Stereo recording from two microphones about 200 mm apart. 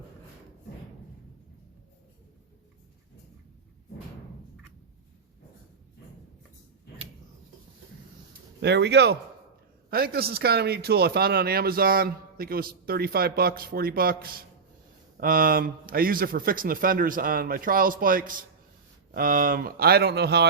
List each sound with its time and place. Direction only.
8.6 s speech: 60° right (ahead or behind)